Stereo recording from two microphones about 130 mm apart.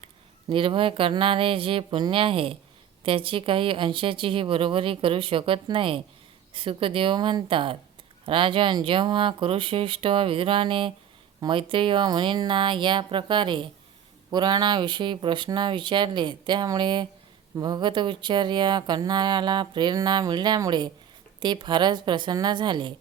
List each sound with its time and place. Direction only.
0.5 s speech: 40° right (ahead or behind)